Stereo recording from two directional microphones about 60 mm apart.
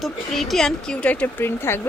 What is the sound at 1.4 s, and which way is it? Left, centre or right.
Speech, left.